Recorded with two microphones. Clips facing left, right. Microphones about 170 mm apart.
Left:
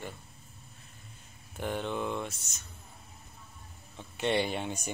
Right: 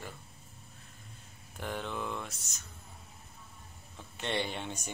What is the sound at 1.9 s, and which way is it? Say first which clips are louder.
Mantra: left 4 dB; 25° left (ahead or behind).